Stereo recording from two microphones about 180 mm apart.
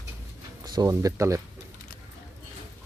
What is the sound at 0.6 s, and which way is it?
Speech, 20° right (ahead or behind).